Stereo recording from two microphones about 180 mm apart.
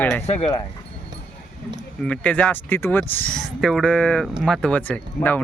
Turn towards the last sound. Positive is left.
turn(degrees=10)  # may be behind; listen again after turning